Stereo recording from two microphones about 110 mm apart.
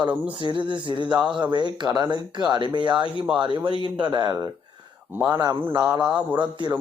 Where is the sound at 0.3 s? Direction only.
45° right (ahead or behind).